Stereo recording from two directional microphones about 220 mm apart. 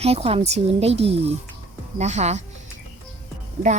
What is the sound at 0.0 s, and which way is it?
A woman's voice, 25° right (ahead or behind).